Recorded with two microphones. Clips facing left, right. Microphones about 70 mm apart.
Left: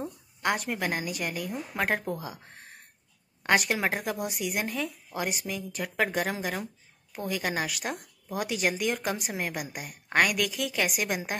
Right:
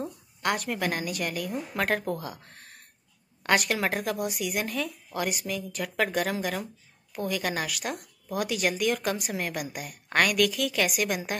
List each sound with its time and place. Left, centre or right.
0.4 s speech: centre